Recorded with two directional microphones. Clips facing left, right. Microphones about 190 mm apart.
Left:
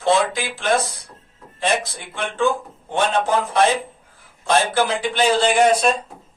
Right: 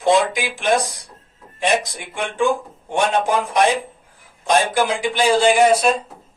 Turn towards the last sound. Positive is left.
turn(degrees=-10)  # may be behind; listen again after turning